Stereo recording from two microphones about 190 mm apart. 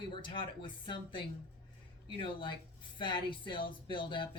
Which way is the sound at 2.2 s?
25° left (ahead or behind).